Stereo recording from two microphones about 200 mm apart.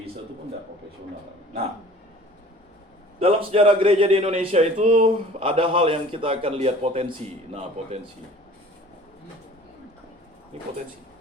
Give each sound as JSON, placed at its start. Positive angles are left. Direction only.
{"t": 3.2, "sound": "a man's voice", "side_deg": -30}